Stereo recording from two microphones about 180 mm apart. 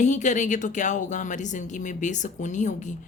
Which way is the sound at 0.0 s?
40° left (ahead or behind).